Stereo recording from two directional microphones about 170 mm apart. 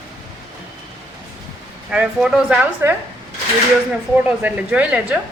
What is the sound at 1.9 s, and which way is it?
A woman's voice, 5° right (ahead or behind).